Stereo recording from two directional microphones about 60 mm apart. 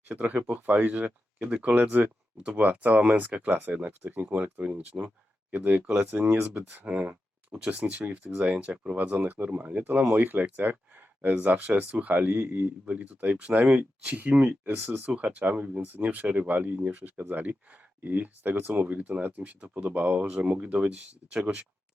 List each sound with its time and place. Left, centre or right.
0.1 s speech: right
20.2 s speech: centre